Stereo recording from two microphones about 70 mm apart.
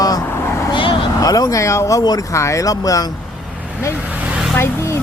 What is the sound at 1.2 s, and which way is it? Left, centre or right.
Speech, left.